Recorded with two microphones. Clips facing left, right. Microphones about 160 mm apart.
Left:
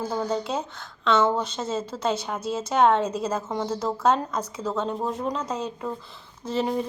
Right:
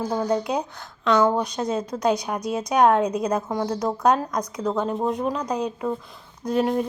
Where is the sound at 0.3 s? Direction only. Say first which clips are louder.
Right 4 dB; 15° right (ahead or behind).